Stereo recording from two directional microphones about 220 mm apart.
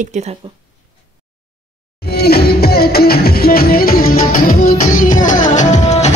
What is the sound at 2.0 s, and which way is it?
Music, 45° left (ahead or behind).